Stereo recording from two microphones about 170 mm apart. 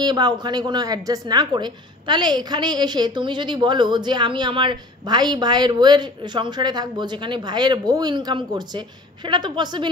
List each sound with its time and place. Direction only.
0.0 s speech: 25° right (ahead or behind)